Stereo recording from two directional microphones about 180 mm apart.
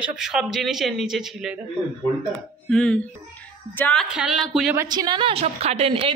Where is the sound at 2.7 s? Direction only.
5° left (ahead or behind).